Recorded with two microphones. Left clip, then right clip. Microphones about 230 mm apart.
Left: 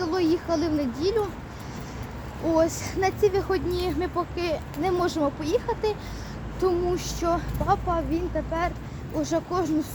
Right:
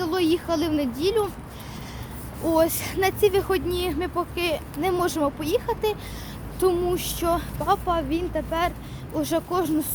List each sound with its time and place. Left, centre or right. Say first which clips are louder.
0.0 s speech: right 1 dB; centre
2.5 s speech: right 2 dB; centre